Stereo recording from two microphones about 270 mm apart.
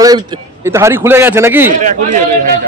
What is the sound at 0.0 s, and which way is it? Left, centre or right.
A man's voice, centre.